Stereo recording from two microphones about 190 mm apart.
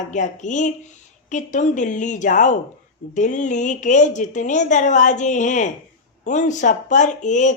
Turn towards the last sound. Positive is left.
turn(degrees=40)  # may be behind; listen again after turning